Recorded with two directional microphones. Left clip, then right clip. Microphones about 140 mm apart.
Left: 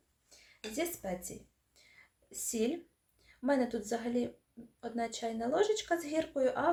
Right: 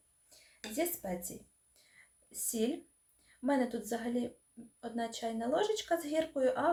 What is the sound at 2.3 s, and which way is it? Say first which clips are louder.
Speech: left 1 dB; 25° left (ahead or behind).